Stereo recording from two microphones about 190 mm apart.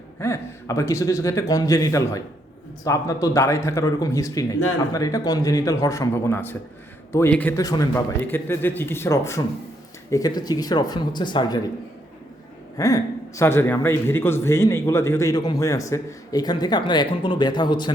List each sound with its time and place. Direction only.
0.2 s a man's voice: 15° left (ahead or behind)
12.7 s a man's voice: 15° left (ahead or behind)